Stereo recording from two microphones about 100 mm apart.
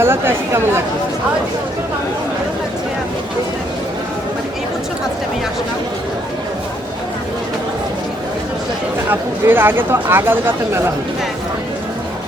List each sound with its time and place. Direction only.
0.0 s speech: 25° right (ahead or behind)
9.0 s speech: 20° right (ahead or behind)